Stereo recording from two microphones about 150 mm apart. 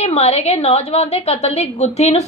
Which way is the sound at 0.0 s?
45° left (ahead or behind).